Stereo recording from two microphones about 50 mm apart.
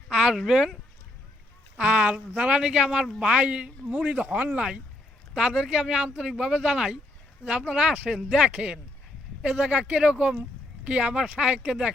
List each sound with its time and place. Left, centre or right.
0.1 s speech: centre
1.8 s speech: right
5.3 s speech: centre